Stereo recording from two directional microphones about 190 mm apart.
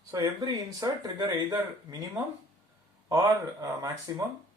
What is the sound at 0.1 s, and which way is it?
Speech, 20° right (ahead or behind).